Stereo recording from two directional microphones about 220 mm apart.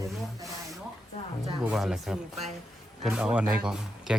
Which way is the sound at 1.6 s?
Centre (ahead or behind).